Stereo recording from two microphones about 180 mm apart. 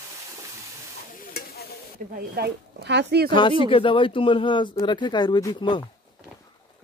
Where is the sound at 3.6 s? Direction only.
30° left (ahead or behind).